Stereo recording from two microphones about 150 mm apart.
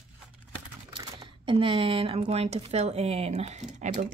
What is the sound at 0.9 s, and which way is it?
Speech, 35° right (ahead or behind).